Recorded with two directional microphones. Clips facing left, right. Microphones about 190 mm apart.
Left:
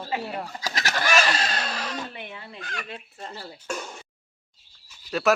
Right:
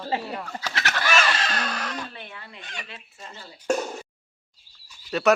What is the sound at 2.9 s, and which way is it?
Speech, 50° left (ahead or behind).